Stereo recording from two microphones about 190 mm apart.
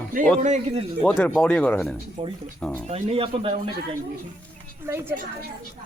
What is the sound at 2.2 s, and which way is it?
Speech, 30° right (ahead or behind).